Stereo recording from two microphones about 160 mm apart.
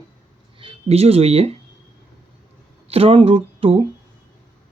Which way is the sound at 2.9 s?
40° right (ahead or behind).